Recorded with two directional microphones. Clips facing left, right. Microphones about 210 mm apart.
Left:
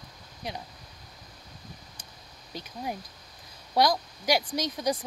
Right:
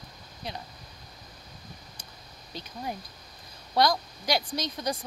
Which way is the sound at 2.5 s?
10° left (ahead or behind).